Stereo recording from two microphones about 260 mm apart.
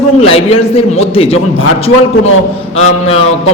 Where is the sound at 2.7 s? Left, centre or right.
Left.